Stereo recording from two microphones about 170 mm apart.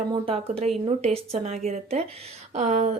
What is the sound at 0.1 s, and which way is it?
A woman's voice, 35° right (ahead or behind).